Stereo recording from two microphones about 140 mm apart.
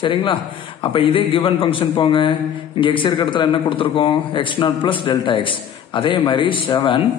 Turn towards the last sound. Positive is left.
turn(degrees=35)  # may be behind; listen again after turning